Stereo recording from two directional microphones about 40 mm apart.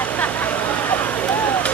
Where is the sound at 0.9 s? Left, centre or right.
Left.